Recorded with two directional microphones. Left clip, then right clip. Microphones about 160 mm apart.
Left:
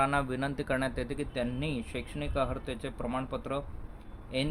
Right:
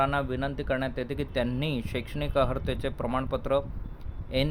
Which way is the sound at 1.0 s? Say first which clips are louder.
Right 4 dB; 30° right (ahead or behind).